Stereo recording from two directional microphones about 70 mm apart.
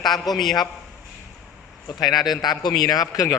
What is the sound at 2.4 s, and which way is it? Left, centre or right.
Speech, left.